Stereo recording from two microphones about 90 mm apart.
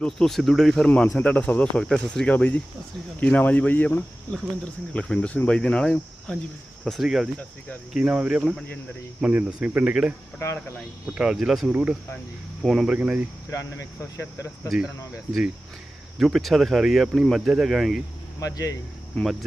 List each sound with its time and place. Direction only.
0.0 s speech: 5° left (ahead or behind)
0.9 s speech: 15° left (ahead or behind); by 7.3 s 5° right (ahead or behind)
7.9 s speech: 15° right (ahead or behind)
10.4 s speech: 30° left (ahead or behind)
11.1 s speech: 10° right (ahead or behind)
11.7 s speech: 15° right (ahead or behind)
12.6 s speech: 5° right (ahead or behind)
13.5 s speech: 35° left (ahead or behind)
16.1 s speech: centre (ahead or behind)
18.3 s speech: 40° left (ahead or behind)
19.2 s speech: centre (ahead or behind)